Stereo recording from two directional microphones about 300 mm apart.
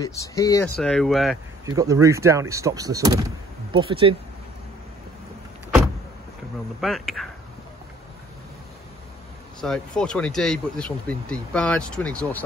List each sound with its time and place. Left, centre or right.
0.0 s speech: centre
1.7 s speech: centre
6.8 s speech: centre
9.6 s speech: centre